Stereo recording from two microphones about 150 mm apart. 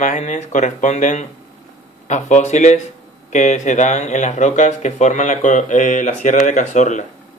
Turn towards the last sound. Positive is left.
turn(degrees=55)  # may be behind; listen again after turning